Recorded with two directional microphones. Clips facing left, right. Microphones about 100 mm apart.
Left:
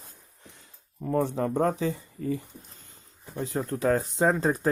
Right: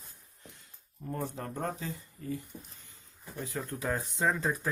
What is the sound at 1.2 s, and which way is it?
Speech, 90° left.